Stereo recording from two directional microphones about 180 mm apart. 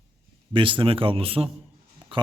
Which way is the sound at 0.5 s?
30° right (ahead or behind).